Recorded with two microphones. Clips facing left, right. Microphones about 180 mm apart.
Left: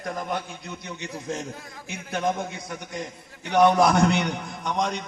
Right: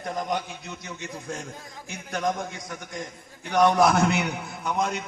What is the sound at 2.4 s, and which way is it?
Speech, centre (ahead or behind).